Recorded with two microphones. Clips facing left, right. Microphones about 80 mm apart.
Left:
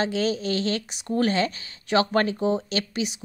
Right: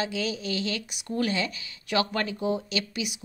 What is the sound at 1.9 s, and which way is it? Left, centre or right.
A woman's voice, left.